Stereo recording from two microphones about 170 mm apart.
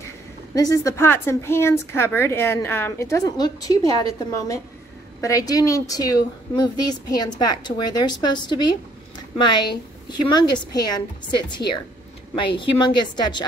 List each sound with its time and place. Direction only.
0.6 s a woman's voice: 20° left (ahead or behind)